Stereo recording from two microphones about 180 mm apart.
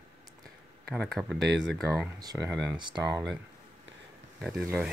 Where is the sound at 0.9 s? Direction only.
5° left (ahead or behind).